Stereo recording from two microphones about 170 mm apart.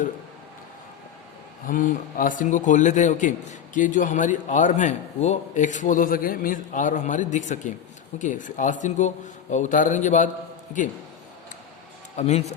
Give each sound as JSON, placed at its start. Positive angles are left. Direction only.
{"t": 1.6, "sound": "a man's voice", "side_deg": 55}
{"t": 12.1, "sound": "a man's voice", "side_deg": 40}